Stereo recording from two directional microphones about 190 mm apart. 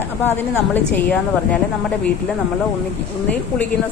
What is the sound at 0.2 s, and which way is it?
A woman's voice, 10° left (ahead or behind).